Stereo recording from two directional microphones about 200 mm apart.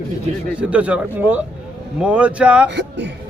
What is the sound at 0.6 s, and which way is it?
A man's voice, 5° right (ahead or behind).